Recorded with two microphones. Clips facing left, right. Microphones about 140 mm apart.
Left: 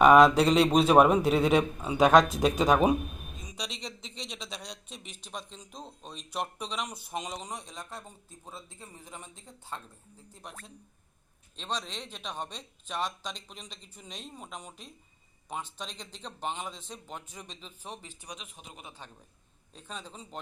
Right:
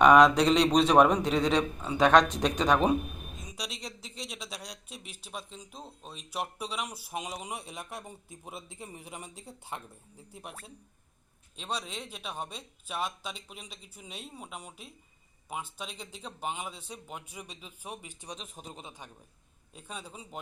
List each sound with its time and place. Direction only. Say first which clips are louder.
0.0 s speech: left 1 dB; 5° left (ahead or behind)
18.2 s speech: right 2 dB; 25° right (ahead or behind)
18.4 s a man's voice: right 4 dB; 40° right (ahead or behind)
19.0 s speech: even; 10° right (ahead or behind)